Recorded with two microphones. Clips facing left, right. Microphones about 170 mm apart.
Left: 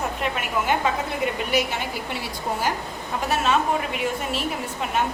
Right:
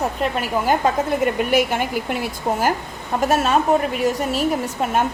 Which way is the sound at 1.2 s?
50° right (ahead or behind).